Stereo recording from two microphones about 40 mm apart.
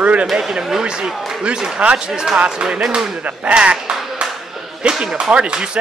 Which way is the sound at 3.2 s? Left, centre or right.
Right.